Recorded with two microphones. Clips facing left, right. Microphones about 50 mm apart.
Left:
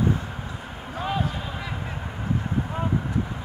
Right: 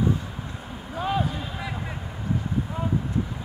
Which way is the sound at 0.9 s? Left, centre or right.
Centre.